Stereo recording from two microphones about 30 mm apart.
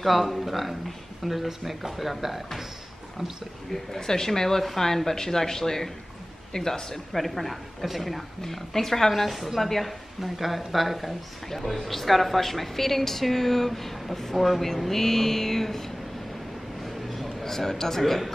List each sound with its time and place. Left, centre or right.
0.0 s speech: centre
3.7 s a woman's voice: centre
7.1 s speech: centre
8.4 s a woman's voice: centre
16.8 s a sound: centre